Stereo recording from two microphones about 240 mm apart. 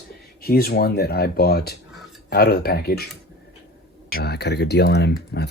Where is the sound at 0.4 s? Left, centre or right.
Left.